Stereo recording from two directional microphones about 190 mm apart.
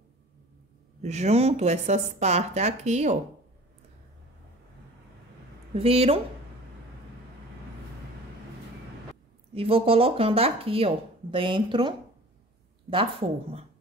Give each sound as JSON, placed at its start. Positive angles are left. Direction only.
{"t": 1.0, "sound": "speech", "side_deg": -35}
{"t": 5.8, "sound": "speech", "side_deg": -30}
{"t": 9.5, "sound": "speech", "side_deg": -30}
{"t": 12.9, "sound": "speech", "side_deg": -30}